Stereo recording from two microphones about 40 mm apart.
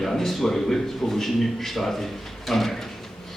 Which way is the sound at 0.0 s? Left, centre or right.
Centre.